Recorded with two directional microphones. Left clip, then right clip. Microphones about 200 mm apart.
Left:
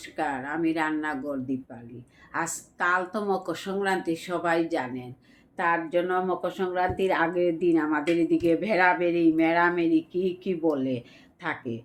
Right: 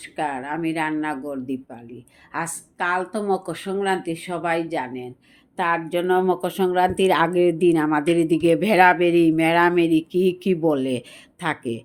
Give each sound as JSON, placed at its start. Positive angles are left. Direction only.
{"t": 0.0, "sound": "a woman's voice", "side_deg": -30}
{"t": 5.5, "sound": "speech", "side_deg": -40}